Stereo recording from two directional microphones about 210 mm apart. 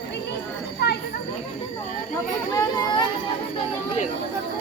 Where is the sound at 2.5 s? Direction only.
15° left (ahead or behind).